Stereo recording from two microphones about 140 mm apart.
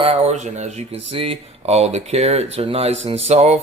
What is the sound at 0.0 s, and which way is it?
Speech, 45° right (ahead or behind).